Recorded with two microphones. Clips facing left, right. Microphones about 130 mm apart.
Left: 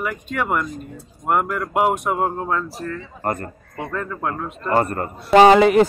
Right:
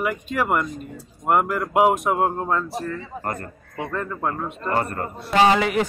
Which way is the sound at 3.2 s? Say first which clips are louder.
Left 4 dB; 30° left (ahead or behind).